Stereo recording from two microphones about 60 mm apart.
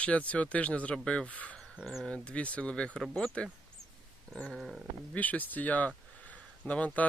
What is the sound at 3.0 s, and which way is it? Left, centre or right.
Speech, centre.